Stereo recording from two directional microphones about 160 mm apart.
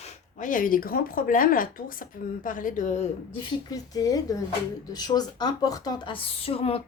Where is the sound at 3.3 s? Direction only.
25° left (ahead or behind).